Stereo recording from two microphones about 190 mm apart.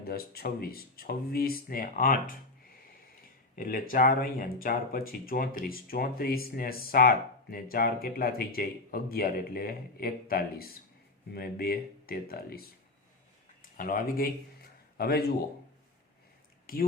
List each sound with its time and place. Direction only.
0.0 s speech: 55° left (ahead or behind)
3.5 s speech: 50° left (ahead or behind)
13.6 s a sound: 45° left (ahead or behind)
16.7 s speech: 50° left (ahead or behind)